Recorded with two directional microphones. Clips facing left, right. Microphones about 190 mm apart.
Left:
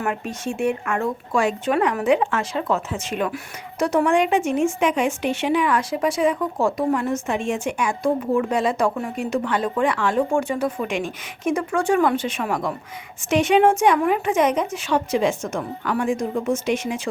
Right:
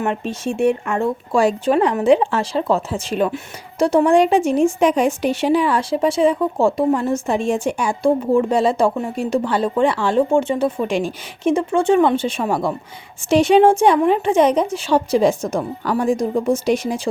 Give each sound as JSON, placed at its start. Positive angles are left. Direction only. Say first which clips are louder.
{"t": 0.0, "sound": "speech", "louder": "right 4 dB", "side_deg": -25}